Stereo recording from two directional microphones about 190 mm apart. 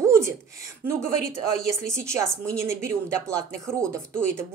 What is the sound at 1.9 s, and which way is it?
A woman's voice, 15° right (ahead or behind).